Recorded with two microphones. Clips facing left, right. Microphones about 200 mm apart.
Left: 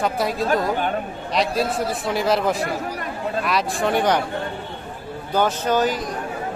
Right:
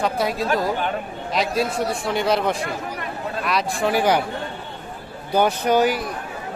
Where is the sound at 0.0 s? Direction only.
Centre (ahead or behind).